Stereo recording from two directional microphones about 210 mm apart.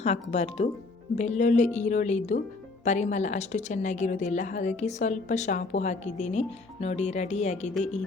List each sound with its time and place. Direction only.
0.0 s a woman's voice: 30° left (ahead or behind)